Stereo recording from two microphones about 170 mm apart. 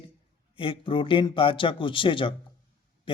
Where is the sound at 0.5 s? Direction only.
30° left (ahead or behind).